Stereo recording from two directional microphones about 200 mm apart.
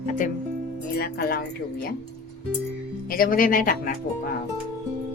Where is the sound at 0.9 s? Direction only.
50° left (ahead or behind).